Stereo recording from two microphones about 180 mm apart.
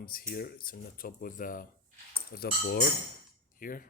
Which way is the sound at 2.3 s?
60° left (ahead or behind).